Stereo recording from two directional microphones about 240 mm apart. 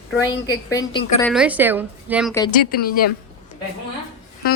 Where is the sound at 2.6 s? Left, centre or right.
Left.